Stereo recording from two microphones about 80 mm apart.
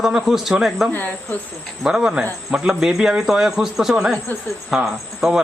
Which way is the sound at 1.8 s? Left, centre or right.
Centre.